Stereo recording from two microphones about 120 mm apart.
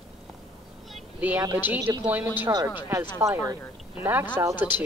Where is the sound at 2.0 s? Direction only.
15° right (ahead or behind).